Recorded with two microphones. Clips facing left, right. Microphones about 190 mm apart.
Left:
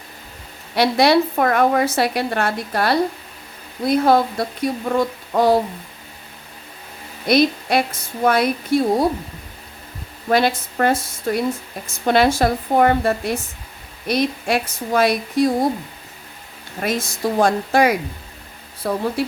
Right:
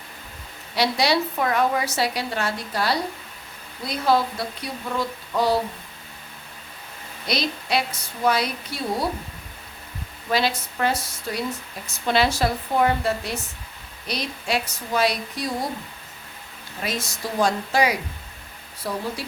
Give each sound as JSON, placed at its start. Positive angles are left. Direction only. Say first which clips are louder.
{"t": 0.8, "sound": "a woman's voice", "louder": "left 7 dB", "side_deg": 55}
{"t": 7.3, "sound": "a woman's voice", "louder": "left 10 dB", "side_deg": 50}
{"t": 10.2, "sound": "a woman's voice", "louder": "left 6 dB", "side_deg": 50}
{"t": 16.8, "sound": "a woman's voice", "louder": "left 8 dB", "side_deg": 50}